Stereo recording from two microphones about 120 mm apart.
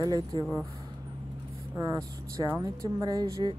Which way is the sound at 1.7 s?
30° right (ahead or behind).